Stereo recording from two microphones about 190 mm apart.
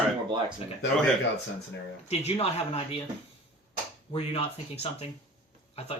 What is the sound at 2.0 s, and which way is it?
Speech, 35° left (ahead or behind).